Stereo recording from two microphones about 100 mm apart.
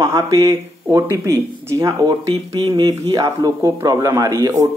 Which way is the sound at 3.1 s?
40° right (ahead or behind).